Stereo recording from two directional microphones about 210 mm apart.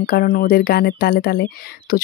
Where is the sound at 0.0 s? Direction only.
45° left (ahead or behind).